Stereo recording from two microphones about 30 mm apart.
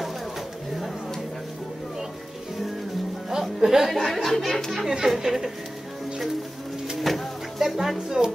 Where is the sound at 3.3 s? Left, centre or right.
Centre.